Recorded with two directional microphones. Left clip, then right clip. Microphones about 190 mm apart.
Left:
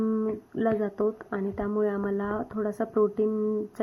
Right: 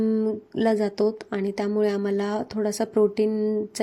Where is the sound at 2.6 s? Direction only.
35° right (ahead or behind).